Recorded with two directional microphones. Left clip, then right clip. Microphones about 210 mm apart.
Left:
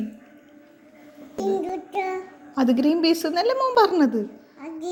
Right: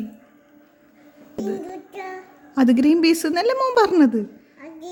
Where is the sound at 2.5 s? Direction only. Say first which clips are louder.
Right 4 dB; 50° right (ahead or behind).